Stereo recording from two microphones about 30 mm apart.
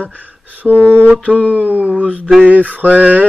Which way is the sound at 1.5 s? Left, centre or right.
Right.